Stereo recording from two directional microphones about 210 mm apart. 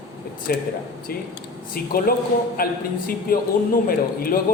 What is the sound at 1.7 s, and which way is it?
A man's voice, 45° left (ahead or behind).